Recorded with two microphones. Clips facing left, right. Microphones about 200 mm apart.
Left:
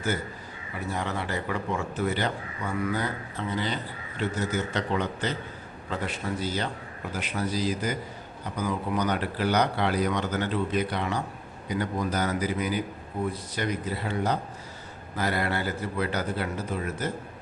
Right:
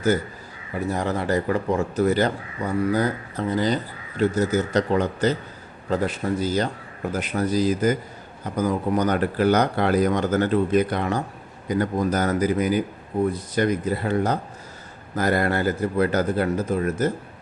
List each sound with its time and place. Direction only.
0.9 s speech: 40° right (ahead or behind)